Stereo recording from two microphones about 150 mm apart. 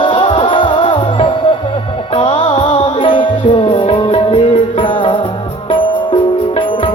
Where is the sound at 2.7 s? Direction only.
50° left (ahead or behind).